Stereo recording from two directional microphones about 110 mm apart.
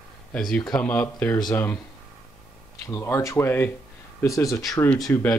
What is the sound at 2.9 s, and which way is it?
Speech, 30° left (ahead or behind).